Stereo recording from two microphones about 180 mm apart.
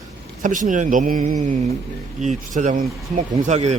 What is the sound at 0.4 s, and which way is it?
Speech, 45° right (ahead or behind).